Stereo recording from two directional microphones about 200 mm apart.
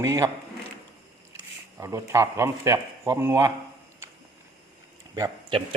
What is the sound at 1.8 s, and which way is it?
Speech, 15° right (ahead or behind).